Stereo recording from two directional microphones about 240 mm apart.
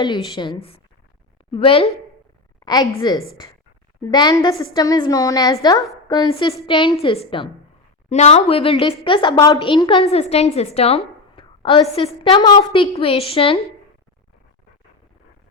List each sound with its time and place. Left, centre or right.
0.0 s a woman's voice: centre